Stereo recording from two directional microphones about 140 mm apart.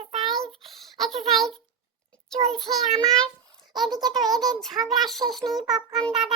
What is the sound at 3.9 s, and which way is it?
Speech, 30° right (ahead or behind).